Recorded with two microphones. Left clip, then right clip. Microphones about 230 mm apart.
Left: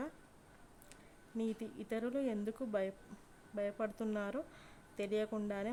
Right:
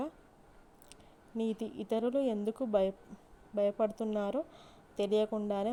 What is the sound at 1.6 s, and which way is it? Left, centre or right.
Speech, centre.